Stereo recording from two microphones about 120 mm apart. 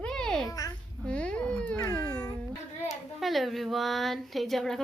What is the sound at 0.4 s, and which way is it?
Speech, 30° left (ahead or behind).